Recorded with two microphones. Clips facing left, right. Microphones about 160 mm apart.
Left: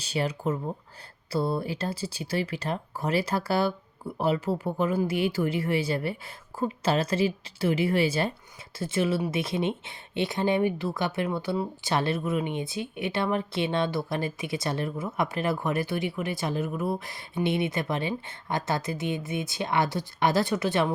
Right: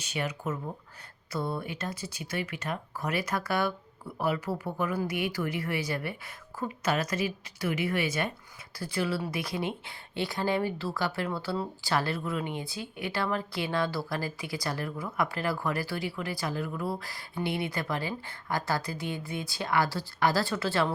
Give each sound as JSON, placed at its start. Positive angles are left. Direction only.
{"t": 0.0, "sound": "a woman's voice", "side_deg": 30}